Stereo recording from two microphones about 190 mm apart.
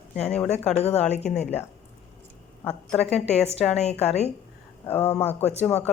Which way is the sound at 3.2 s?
35° left (ahead or behind).